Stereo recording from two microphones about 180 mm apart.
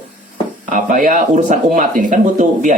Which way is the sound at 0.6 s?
45° right (ahead or behind).